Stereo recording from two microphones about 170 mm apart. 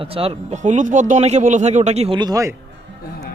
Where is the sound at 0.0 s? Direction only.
35° right (ahead or behind).